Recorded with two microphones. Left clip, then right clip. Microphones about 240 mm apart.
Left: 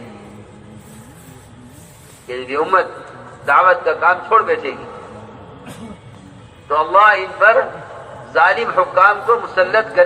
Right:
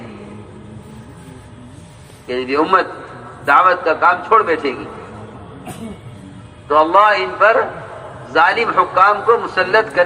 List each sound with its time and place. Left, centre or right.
2.2 s a man's voice: right
6.7 s a man's voice: right